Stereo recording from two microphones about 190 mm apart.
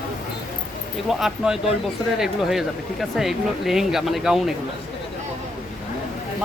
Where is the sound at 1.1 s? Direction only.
Centre (ahead or behind).